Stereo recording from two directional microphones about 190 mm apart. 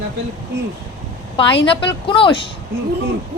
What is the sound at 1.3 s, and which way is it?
A woman's voice, 25° left (ahead or behind).